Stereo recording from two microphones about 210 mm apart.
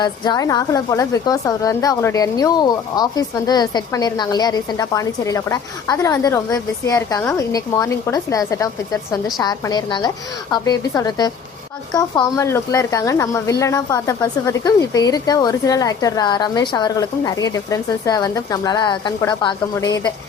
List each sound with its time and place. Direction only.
0.0 s a woman's voice: 20° left (ahead or behind)